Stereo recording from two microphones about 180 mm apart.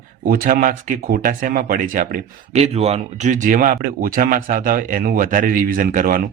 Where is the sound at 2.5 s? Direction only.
35° right (ahead or behind).